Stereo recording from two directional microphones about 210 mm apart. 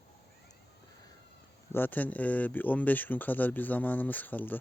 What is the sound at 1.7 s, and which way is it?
Speech, 10° left (ahead or behind).